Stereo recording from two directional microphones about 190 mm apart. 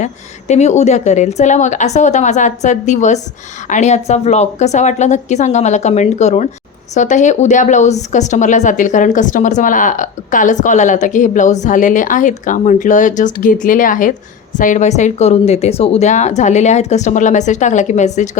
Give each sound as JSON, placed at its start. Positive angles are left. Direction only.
{"t": 0.0, "sound": "a woman's voice", "side_deg": 35}